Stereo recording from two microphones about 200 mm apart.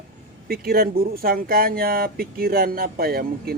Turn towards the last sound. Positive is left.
turn(degrees=-50)  # may be behind; listen again after turning